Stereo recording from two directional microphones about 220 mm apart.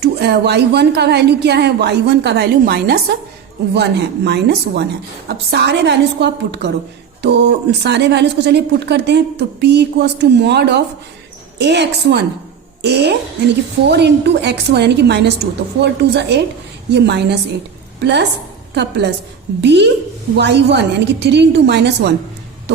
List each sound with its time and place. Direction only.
0.0 s a woman's voice: 50° right (ahead or behind)